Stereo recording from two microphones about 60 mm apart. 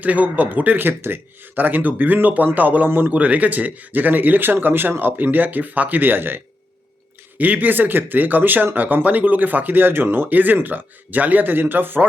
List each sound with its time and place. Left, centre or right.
0.0 s speech: right